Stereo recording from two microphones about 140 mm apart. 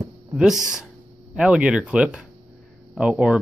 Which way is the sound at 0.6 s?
20° left (ahead or behind).